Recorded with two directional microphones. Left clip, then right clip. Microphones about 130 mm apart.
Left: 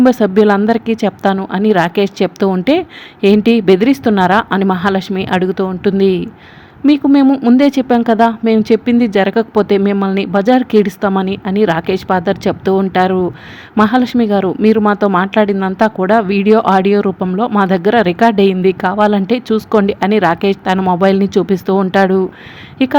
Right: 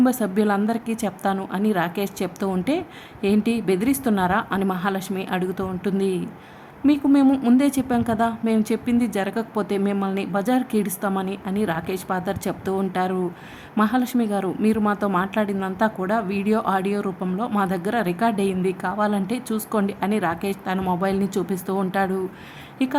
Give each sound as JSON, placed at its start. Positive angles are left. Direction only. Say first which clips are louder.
{"t": 0.0, "sound": "a woman's voice", "louder": "left 12 dB", "side_deg": 35}
{"t": 7.3, "sound": "speech", "louder": "left 8 dB", "side_deg": 20}
{"t": 7.5, "sound": "a woman's voice", "louder": "left 10 dB", "side_deg": 35}